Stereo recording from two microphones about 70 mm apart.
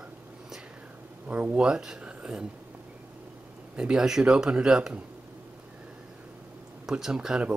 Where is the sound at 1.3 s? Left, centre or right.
Right.